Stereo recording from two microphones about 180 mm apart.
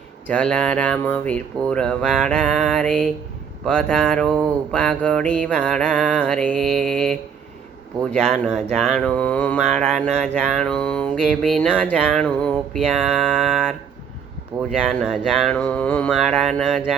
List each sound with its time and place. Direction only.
0.3 s speech: 5° left (ahead or behind)
1.3 s mantra: 5° left (ahead or behind)
14.5 s speech: 25° right (ahead or behind)
14.8 s mantra: centre (ahead or behind)